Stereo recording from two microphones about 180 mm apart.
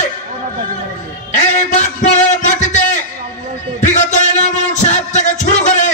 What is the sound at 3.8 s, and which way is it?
Music, 40° left (ahead or behind).